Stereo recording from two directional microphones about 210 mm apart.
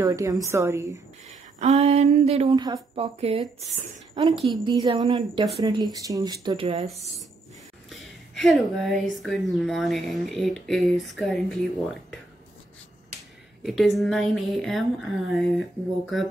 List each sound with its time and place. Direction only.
0.0 s a woman's voice: 15° right (ahead or behind)
1.6 s a woman's voice: 30° right (ahead or behind)
7.9 s a sound: centre (ahead or behind)
9.1 s speech: centre (ahead or behind)
13.6 s speech: centre (ahead or behind)